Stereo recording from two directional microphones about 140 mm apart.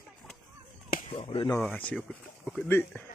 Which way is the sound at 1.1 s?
50° left (ahead or behind).